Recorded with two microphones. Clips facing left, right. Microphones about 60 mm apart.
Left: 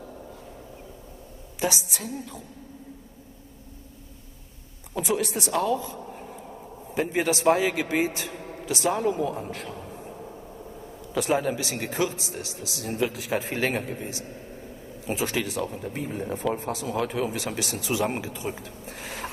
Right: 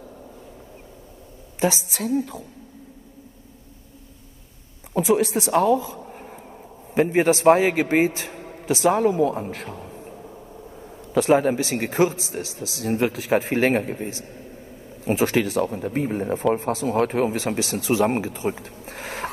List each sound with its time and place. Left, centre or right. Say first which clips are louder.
2.0 s a woman's voice: right 11 dB; right
5.1 s a woman's voice: right 6 dB; right
6.1 s a sound: right 1 dB; right
7.1 s speech: right 6 dB; right
8.2 s a sound: even; right
8.8 s a woman's voice: right 6 dB; right
11.1 s a woman's voice: right 7 dB; right